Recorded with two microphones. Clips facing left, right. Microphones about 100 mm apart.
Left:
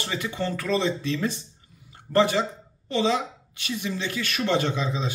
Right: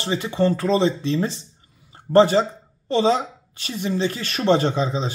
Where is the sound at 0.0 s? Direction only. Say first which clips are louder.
Right 8 dB; 25° right (ahead or behind).